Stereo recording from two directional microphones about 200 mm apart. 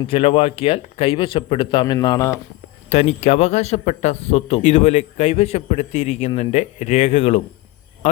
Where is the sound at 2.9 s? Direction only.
35° left (ahead or behind).